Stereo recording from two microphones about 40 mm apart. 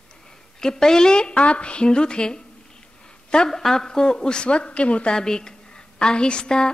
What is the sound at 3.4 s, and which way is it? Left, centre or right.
A woman's voice, centre.